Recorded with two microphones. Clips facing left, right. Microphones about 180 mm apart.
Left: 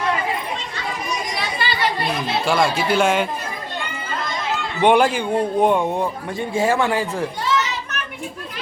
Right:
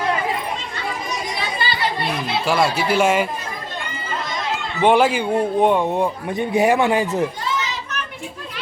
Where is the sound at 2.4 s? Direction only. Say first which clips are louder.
Even; 5° right (ahead or behind).